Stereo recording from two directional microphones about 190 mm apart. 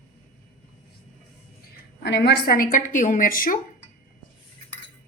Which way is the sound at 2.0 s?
60° left (ahead or behind).